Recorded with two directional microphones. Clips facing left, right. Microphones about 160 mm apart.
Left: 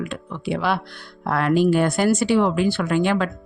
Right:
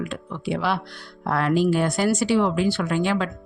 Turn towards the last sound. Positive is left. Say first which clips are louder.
# left 3 dB
turn(degrees=55)  # may be behind; listen again after turning